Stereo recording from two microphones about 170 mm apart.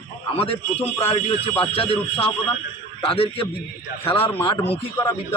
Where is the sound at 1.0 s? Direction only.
35° left (ahead or behind).